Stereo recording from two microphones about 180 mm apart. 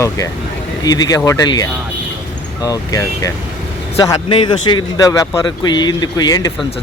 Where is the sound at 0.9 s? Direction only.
20° left (ahead or behind).